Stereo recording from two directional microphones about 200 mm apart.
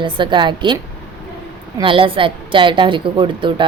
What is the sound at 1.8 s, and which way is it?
Speech, 25° right (ahead or behind).